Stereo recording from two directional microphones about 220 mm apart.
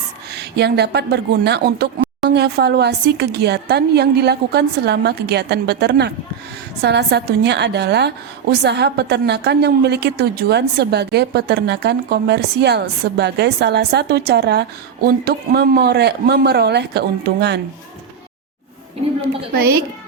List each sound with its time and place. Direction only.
0.3 s a woman's voice: 50° right (ahead or behind)
19.5 s a woman's voice: 45° right (ahead or behind)